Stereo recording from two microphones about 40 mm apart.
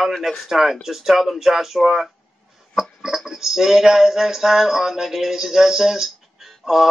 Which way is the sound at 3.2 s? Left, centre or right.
Centre.